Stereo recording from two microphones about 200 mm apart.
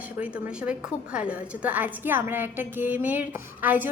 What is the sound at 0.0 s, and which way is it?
A woman's voice, 5° right (ahead or behind).